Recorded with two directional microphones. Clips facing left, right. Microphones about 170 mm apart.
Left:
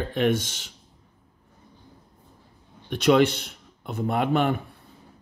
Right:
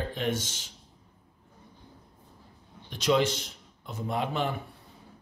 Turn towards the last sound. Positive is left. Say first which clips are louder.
# left 7 dB
turn(degrees=60)  # may be behind; listen again after turning